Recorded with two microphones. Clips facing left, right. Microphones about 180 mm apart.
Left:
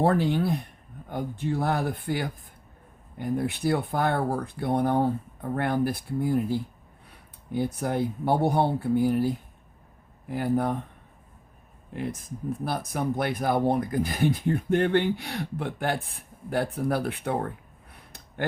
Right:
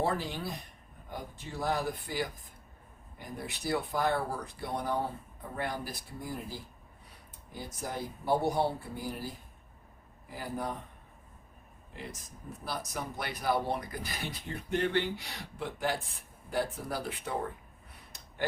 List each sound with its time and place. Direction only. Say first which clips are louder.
0.0 s speech: left 9 dB; 60° left (ahead or behind)
12.6 s speech: left 8 dB; 55° left (ahead or behind)